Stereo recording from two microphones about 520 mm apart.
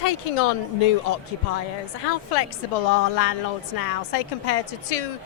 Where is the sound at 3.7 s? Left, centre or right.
Left.